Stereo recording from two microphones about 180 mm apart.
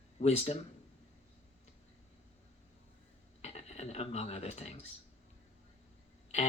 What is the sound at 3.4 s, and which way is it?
Speech, 35° left (ahead or behind).